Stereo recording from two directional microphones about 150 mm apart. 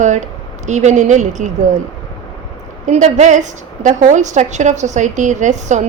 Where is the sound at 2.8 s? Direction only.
50° right (ahead or behind).